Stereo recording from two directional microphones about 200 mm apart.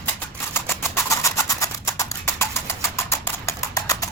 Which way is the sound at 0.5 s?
10° left (ahead or behind).